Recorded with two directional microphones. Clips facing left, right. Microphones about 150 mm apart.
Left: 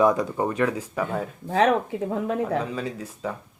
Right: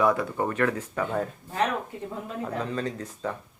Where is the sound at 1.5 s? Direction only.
90° left.